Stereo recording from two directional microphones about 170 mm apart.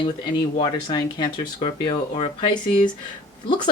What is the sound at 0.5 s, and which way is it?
Speech, 30° left (ahead or behind).